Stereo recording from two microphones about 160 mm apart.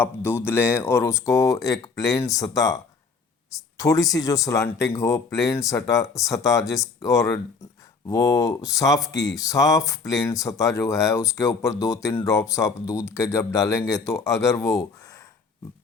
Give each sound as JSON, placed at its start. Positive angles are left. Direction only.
{"t": 0.0, "sound": "speech", "side_deg": 15}